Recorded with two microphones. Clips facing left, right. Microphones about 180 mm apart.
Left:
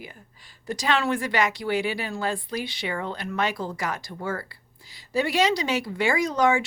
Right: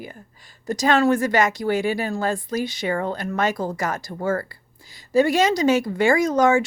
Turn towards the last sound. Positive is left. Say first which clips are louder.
# right 5 dB
turn(degrees=-45)  # may be behind; listen again after turning